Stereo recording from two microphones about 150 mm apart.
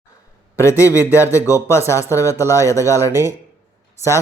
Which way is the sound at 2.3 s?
15° right (ahead or behind).